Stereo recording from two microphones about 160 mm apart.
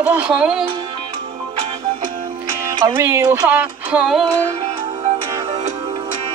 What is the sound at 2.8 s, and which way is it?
Music, 15° right (ahead or behind).